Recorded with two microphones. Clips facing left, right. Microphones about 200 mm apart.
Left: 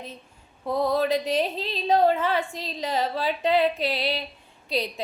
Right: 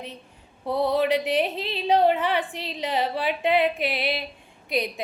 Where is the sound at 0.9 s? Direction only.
15° right (ahead or behind).